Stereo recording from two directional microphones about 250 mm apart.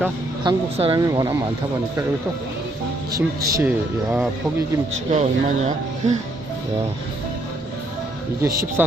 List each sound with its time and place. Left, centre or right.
0.4 s speech: centre
3.1 s speech: centre
5.1 s speech: right
8.4 s speech: centre